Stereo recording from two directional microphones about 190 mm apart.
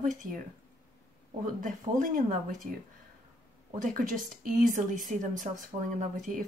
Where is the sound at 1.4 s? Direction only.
45° right (ahead or behind).